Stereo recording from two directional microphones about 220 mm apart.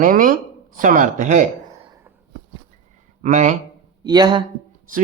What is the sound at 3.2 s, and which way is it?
Speech, 35° right (ahead or behind).